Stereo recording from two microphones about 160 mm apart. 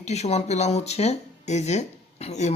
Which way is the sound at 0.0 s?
45° left (ahead or behind).